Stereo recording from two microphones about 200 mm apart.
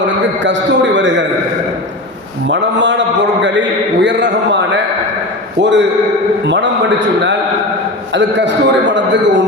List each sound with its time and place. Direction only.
0.4 s a man's voice: 65° right (ahead or behind)
2.5 s a man's voice: 65° right (ahead or behind)
3.4 s a sound: 65° right (ahead or behind)
6.4 s a man's voice: 60° right (ahead or behind)
8.1 s a man's voice: 60° right (ahead or behind)